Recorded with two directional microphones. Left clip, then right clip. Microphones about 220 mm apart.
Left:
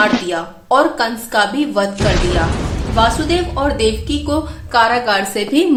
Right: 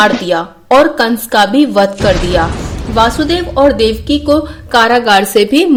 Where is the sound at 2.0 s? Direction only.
Centre (ahead or behind).